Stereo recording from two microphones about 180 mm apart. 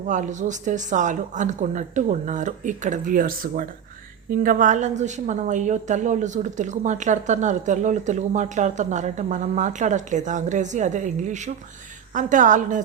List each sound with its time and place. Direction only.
0.1 s a woman's voice: 45° right (ahead or behind)